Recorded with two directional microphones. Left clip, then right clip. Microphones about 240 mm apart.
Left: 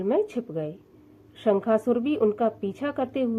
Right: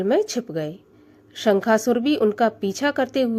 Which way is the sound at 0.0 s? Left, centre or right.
Right.